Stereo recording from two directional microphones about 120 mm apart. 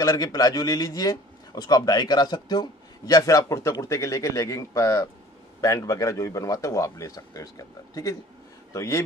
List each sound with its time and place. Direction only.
0.0 s a man's voice: 30° left (ahead or behind)